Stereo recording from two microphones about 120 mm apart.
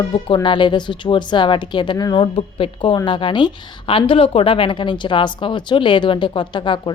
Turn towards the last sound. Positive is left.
turn(degrees=40)  # may be behind; listen again after turning